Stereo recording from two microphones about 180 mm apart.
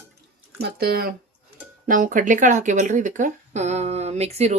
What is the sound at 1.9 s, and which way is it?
Speech, 50° right (ahead or behind).